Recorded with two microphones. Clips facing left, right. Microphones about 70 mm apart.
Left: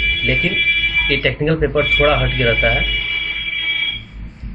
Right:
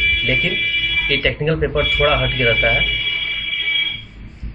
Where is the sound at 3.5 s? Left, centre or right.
Left.